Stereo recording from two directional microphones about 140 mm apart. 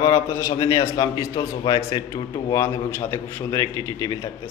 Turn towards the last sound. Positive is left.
turn(degrees=20)  # may be behind; listen again after turning